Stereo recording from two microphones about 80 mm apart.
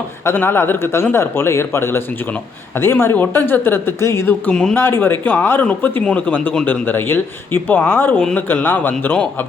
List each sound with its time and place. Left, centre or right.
0.3 s a man's voice: left